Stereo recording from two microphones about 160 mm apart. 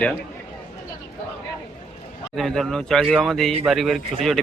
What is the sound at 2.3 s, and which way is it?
A man's voice, centre (ahead or behind).